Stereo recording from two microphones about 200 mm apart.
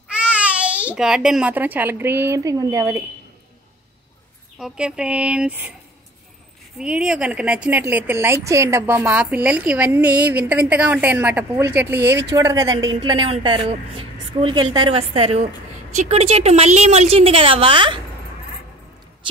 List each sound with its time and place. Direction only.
0.1 s a child's voice: 5° right (ahead or behind)
4.6 s speech: 5° right (ahead or behind)
6.8 s a woman's voice: 5° right (ahead or behind); by 18.0 s 25° right (ahead or behind)